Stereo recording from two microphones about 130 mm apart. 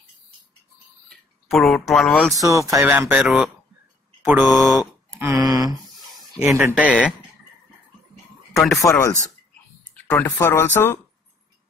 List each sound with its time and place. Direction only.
1.5 s speech: centre (ahead or behind)
2.3 s speech: 25° right (ahead or behind)
2.8 s speech: 10° right (ahead or behind)
4.3 s speech: centre (ahead or behind)
5.2 s speech: 25° right (ahead or behind)
6.4 s speech: 15° right (ahead or behind)
8.8 s speech: 20° left (ahead or behind)